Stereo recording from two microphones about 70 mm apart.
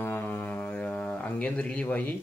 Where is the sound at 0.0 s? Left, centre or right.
Left.